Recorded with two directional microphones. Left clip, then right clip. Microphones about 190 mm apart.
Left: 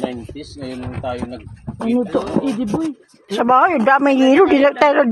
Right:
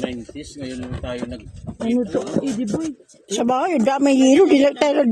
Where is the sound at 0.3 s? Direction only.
70° right (ahead or behind).